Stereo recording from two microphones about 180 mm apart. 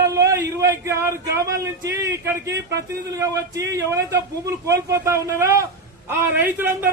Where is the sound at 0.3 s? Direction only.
15° right (ahead or behind).